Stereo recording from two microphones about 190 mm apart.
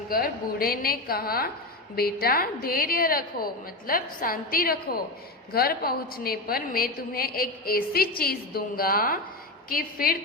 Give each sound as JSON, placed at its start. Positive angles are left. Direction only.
{"t": 0.1, "sound": "a woman's voice", "side_deg": 50}